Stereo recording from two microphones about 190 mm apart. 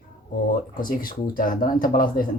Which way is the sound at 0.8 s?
50° left (ahead or behind).